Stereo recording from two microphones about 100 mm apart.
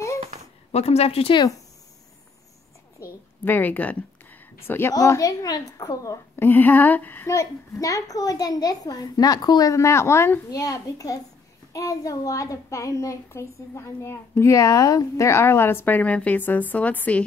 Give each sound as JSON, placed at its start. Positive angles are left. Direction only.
{"t": 0.7, "sound": "a woman's voice", "side_deg": 90}
{"t": 1.3, "sound": "a woman's voice", "side_deg": 40}
{"t": 3.4, "sound": "a woman's voice", "side_deg": 20}
{"t": 4.9, "sound": "a woman's voice", "side_deg": 35}
{"t": 6.3, "sound": "a woman's voice", "side_deg": 20}
{"t": 7.2, "sound": "a woman's voice", "side_deg": 30}